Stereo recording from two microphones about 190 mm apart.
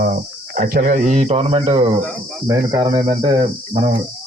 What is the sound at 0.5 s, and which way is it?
Speech, 50° right (ahead or behind).